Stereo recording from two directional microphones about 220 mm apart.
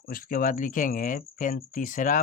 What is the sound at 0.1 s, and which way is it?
Speech, 40° left (ahead or behind).